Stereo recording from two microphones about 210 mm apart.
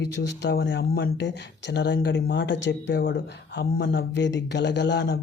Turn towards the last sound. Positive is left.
turn(degrees=55)  # may be behind; listen again after turning